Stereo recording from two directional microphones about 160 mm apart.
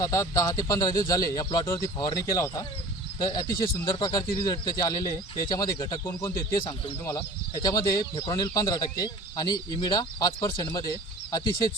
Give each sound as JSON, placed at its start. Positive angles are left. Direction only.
{"t": 0.0, "sound": "speech", "side_deg": 20}